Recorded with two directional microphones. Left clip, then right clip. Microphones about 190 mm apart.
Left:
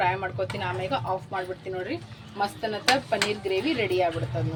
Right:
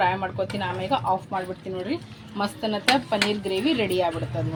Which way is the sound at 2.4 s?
20° right (ahead or behind).